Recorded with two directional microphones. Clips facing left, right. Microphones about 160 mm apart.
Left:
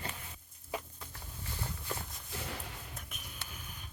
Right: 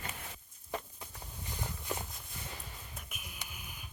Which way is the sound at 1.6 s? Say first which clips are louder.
Right 2 dB; 20° right (ahead or behind).